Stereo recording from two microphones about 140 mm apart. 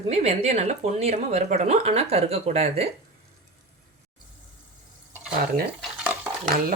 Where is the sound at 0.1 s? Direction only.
50° right (ahead or behind).